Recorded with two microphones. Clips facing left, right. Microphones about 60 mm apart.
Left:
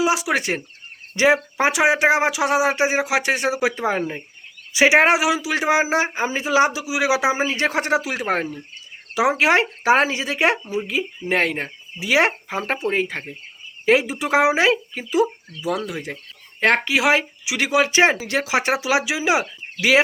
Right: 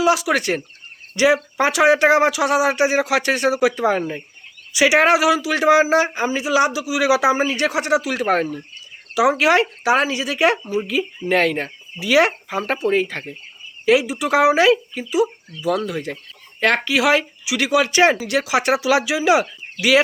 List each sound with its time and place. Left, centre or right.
0.0 s speech: left
13.8 s speech: left
15.9 s speech: left